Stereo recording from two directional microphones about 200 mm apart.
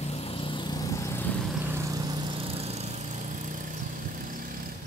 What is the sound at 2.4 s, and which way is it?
Lawn mower, 30° right (ahead or behind).